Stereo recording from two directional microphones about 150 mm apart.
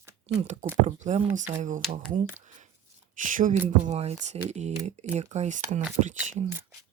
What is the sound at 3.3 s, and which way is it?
Speech, 60° right (ahead or behind).